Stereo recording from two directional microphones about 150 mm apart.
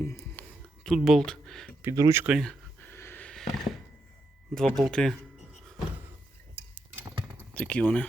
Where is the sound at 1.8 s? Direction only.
20° right (ahead or behind).